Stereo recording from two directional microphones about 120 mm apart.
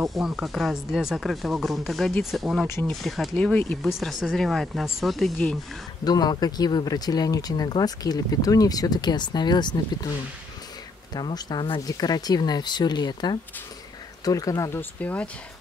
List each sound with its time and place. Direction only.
0.1 s speech: centre (ahead or behind)
2.6 s speech: 20° left (ahead or behind)
2.9 s speech: centre (ahead or behind)
6.0 s speech: 35° left (ahead or behind)
11.1 s speech: 35° left (ahead or behind); by 15.2 s 10° left (ahead or behind)